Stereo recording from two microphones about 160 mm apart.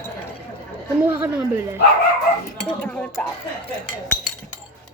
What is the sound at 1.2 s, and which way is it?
Speech, 15° right (ahead or behind).